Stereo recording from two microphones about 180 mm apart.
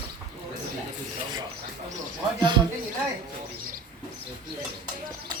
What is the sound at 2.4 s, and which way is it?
Speech, 25° right (ahead or behind).